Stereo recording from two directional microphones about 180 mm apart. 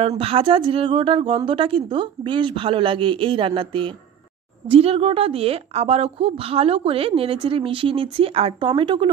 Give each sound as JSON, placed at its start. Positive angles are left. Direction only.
{"t": 0.2, "sound": "a woman's voice", "side_deg": -30}